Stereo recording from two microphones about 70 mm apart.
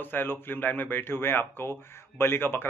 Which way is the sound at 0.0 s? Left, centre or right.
Left.